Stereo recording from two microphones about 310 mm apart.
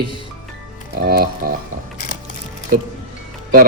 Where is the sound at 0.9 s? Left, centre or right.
Right.